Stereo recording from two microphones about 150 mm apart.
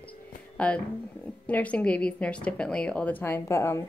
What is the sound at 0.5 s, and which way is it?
Speech, 5° left (ahead or behind).